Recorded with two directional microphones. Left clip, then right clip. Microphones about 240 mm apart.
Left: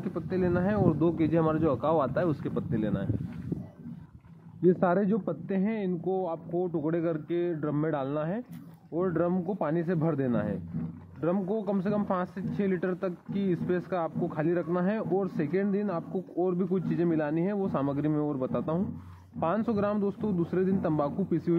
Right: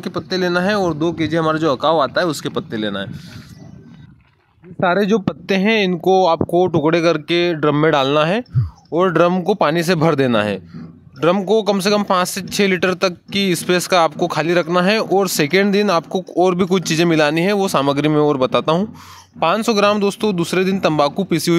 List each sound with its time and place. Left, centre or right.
0.0 s speech: right
4.7 s speech: right
5.2 s speech: right